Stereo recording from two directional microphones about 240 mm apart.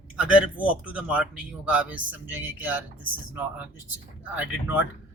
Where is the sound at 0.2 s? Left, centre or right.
Centre.